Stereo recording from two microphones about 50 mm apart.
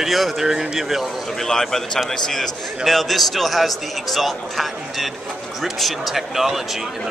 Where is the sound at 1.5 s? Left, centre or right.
Centre.